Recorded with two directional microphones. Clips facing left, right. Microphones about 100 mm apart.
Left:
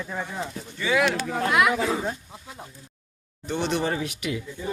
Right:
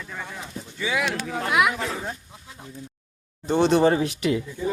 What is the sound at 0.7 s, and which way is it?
Speech, 5° right (ahead or behind).